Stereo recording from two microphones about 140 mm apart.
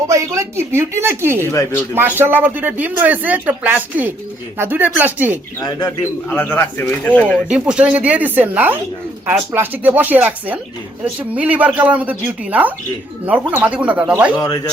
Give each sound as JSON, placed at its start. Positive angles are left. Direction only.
{"t": 0.1, "sound": "a woman's voice", "side_deg": -20}
{"t": 1.5, "sound": "speech", "side_deg": 15}
{"t": 2.0, "sound": "speech", "side_deg": -15}
{"t": 5.5, "sound": "speech", "side_deg": 25}
{"t": 6.3, "sound": "speech", "side_deg": 15}
{"t": 7.4, "sound": "speech", "side_deg": -5}
{"t": 14.3, "sound": "speech", "side_deg": 25}